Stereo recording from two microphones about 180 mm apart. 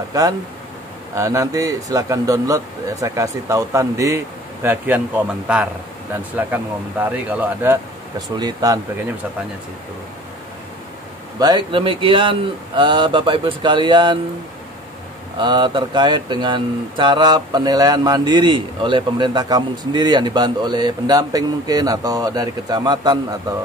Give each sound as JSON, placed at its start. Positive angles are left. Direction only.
{"t": 1.1, "sound": "speech", "side_deg": -15}
{"t": 8.4, "sound": "speech", "side_deg": -20}
{"t": 11.3, "sound": "speech", "side_deg": -25}
{"t": 15.3, "sound": "speech", "side_deg": -25}